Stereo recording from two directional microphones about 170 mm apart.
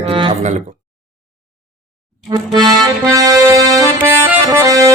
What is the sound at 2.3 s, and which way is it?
Accordion, 25° right (ahead or behind).